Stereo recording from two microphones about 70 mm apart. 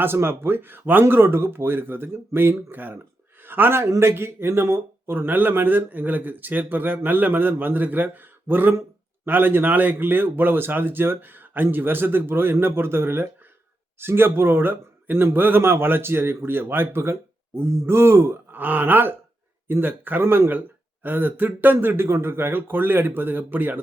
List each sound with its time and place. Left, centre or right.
0.0 s a man's voice: right
3.8 s a man's voice: right
4.1 s speech: right